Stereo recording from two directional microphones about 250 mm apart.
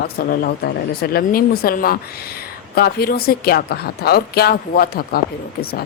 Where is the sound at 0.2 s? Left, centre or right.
Left.